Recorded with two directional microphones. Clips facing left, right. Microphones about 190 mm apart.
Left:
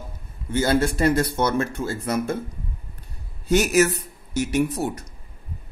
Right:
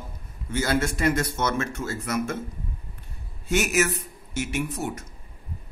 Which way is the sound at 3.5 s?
35° left (ahead or behind).